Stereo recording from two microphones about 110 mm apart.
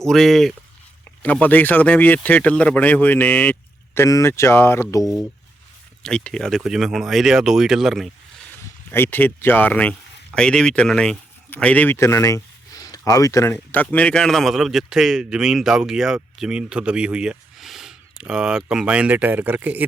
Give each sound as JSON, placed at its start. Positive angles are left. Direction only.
{"t": 0.0, "sound": "speech", "side_deg": 5}
{"t": 1.2, "sound": "speech", "side_deg": 15}
{"t": 4.0, "sound": "speech", "side_deg": 25}
{"t": 6.0, "sound": "speech", "side_deg": 10}
{"t": 8.9, "sound": "speech", "side_deg": 20}